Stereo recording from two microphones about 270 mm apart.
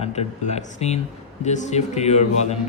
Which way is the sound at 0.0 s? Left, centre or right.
Left.